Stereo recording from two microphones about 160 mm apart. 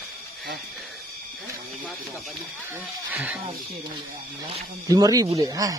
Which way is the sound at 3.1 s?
10° right (ahead or behind).